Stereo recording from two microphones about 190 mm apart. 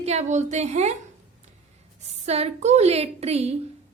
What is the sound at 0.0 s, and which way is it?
Speech, 35° right (ahead or behind).